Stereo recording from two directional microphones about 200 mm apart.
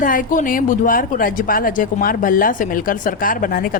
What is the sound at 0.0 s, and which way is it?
A woman's voice, 45° left (ahead or behind).